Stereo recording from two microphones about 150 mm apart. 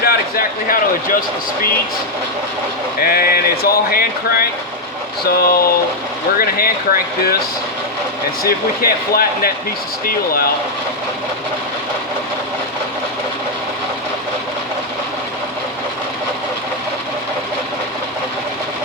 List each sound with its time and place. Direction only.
0.0 s a sound: 80° left
3.0 s speech: 85° left
6.3 s speech: 75° left (ahead or behind)
8.4 s speech: 80° left
10.1 s speech: 90° left